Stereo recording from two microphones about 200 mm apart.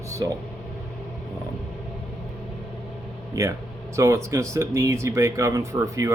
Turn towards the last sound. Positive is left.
turn(degrees=-15)  # may be behind; listen again after turning